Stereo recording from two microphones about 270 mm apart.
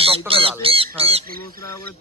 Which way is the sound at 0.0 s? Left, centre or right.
Right.